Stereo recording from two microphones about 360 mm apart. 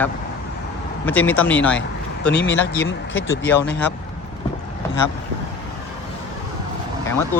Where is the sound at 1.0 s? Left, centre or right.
Centre.